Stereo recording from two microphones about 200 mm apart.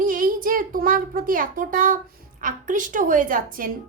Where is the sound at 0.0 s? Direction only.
45° right (ahead or behind).